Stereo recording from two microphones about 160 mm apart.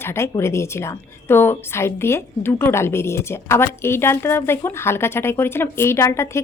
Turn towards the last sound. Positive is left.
turn(degrees=15)  # may be behind; listen again after turning